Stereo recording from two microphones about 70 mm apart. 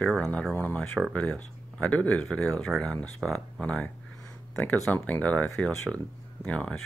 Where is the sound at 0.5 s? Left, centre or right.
Left.